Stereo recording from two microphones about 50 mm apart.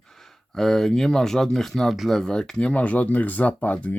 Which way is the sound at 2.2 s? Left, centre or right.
Centre.